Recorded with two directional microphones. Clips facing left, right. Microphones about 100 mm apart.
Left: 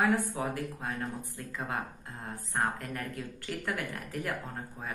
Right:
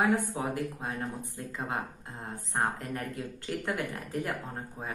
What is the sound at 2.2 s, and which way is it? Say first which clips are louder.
Speech: right 1 dB; 20° right (ahead or behind).